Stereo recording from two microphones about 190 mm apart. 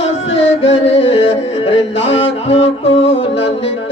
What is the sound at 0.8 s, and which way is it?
Carnatic music, 30° left (ahead or behind).